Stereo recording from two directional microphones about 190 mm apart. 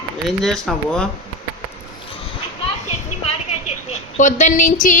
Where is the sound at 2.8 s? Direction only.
35° left (ahead or behind).